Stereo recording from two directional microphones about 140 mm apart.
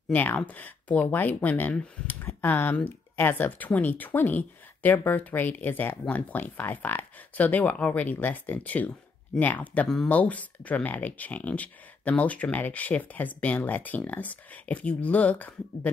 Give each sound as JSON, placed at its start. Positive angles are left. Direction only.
{"t": 0.1, "sound": "speech", "side_deg": 10}